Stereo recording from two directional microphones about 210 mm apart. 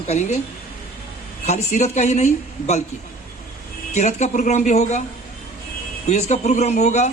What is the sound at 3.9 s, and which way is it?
Speech, 35° left (ahead or behind).